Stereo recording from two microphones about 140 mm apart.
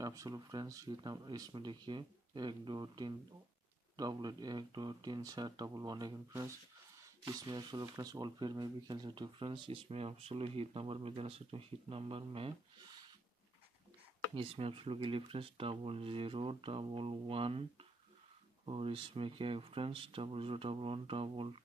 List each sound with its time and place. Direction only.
0.0 s speech: 25° right (ahead or behind); by 12.5 s 40° right (ahead or behind)
14.3 s speech: 40° right (ahead or behind)
18.7 s speech: 40° right (ahead or behind)